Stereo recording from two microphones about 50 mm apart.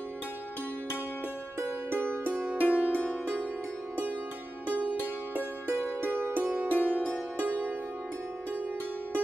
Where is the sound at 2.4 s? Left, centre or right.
Right.